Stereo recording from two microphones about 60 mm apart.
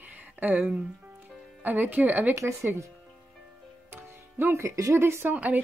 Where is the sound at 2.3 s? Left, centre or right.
Right.